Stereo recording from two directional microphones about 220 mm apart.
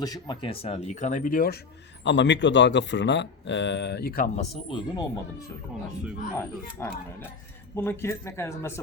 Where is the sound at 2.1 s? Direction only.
55° left (ahead or behind).